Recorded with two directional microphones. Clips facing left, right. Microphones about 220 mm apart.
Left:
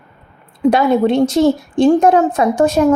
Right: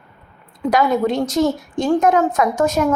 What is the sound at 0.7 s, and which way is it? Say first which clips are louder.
A woman's voice: left 3 dB; 30° left (ahead or behind).